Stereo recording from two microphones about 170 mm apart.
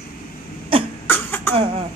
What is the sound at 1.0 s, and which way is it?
Cough, 10° left (ahead or behind).